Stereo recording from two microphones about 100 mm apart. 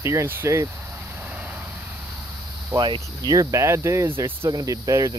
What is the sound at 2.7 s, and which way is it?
Cricket, 30° right (ahead or behind).